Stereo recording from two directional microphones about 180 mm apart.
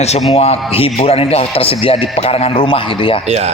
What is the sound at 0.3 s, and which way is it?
A man's voice, 30° left (ahead or behind).